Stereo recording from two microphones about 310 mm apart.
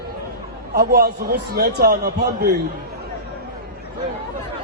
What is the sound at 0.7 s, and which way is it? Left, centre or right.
A man's voice, right.